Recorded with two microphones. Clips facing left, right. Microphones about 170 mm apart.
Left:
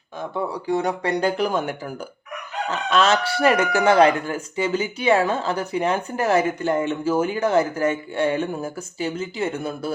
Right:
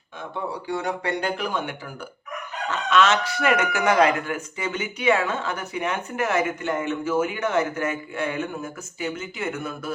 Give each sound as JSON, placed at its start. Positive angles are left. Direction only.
{"t": 0.7, "sound": "speech", "side_deg": 35}